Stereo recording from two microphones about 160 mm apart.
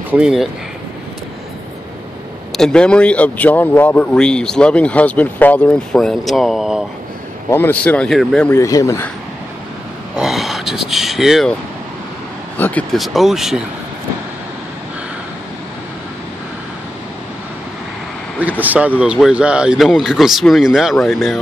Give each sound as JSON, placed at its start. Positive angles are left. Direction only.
{"t": 0.1, "sound": "speech", "side_deg": -5}
{"t": 2.5, "sound": "a man's voice", "side_deg": 5}
{"t": 7.4, "sound": "a man's voice", "side_deg": 15}
{"t": 8.5, "sound": "a man's voice", "side_deg": 20}
{"t": 10.1, "sound": "speech", "side_deg": -5}
{"t": 12.5, "sound": "vehicle", "side_deg": 10}
{"t": 12.9, "sound": "speech", "side_deg": 0}
{"t": 18.6, "sound": "speech", "side_deg": -10}